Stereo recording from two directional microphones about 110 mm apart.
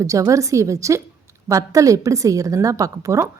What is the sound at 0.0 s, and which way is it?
A woman's voice, 30° right (ahead or behind).